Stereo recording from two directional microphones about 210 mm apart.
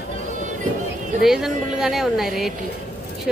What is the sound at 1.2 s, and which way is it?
Speech, centre (ahead or behind).